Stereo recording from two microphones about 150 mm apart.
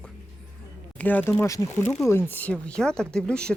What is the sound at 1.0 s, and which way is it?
Speech, 10° left (ahead or behind).